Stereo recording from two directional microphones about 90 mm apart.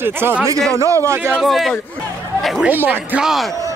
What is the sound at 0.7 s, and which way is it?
Speech, 35° right (ahead or behind).